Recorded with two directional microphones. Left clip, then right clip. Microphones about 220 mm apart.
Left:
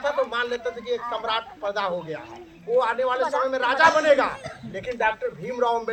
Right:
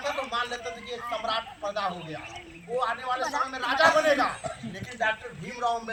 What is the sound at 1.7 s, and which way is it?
Speech, 35° left (ahead or behind).